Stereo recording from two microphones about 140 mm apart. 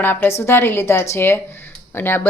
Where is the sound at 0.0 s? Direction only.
15° left (ahead or behind).